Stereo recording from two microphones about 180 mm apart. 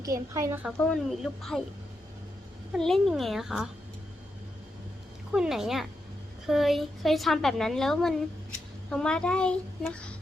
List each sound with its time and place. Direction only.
0.0 s a woman's voice: 20° right (ahead or behind)
0.8 s a woman's voice: 5° left (ahead or behind)
2.7 s a woman's voice: centre (ahead or behind)
5.3 s a woman's voice: 5° right (ahead or behind)